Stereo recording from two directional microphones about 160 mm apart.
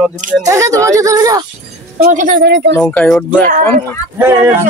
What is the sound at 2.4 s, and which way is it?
Speech, 90° right.